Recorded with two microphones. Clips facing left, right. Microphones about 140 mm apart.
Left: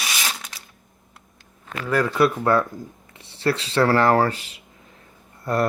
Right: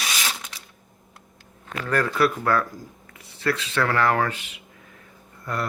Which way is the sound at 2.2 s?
25° left (ahead or behind).